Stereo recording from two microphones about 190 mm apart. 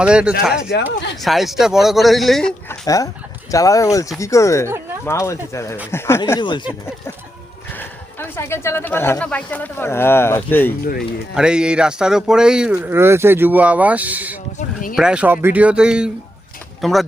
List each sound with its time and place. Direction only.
0.0 s speech: 5° right (ahead or behind)
0.7 s speech: 60° left (ahead or behind)
1.2 s speech: centre (ahead or behind)
2.8 s speech: 15° left (ahead or behind)
7.8 s speech: 10° left (ahead or behind)
11.3 s speech: 5° right (ahead or behind)